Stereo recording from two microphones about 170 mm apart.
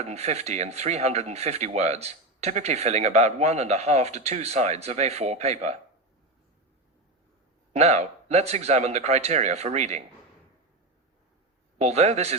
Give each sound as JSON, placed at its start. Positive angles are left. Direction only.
{"t": 0.0, "sound": "speech", "side_deg": -40}
{"t": 7.7, "sound": "speech", "side_deg": -40}
{"t": 11.8, "sound": "speech", "side_deg": -40}